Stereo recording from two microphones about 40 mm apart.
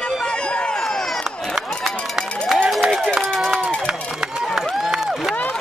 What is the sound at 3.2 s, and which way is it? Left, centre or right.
Run, centre.